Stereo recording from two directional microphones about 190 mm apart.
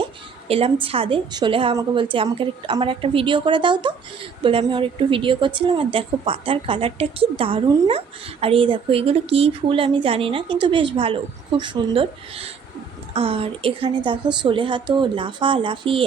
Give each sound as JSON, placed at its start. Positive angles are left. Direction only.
{"t": 0.0, "sound": "a woman's voice", "side_deg": -30}